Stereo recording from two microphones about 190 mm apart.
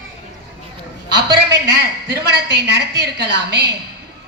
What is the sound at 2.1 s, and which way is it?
A man's voice, 60° right (ahead or behind).